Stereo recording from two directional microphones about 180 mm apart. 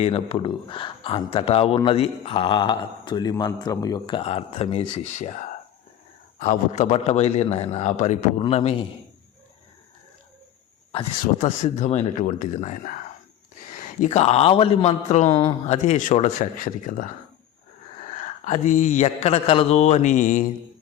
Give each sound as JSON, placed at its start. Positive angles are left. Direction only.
{"t": 0.0, "sound": "speech", "side_deg": 30}
{"t": 6.4, "sound": "a man's voice", "side_deg": 40}
{"t": 11.6, "sound": "a man's voice", "side_deg": 40}
{"t": 15.3, "sound": "speech", "side_deg": 25}
{"t": 15.6, "sound": "a man's voice", "side_deg": 40}
{"t": 18.1, "sound": "a man's voice", "side_deg": 40}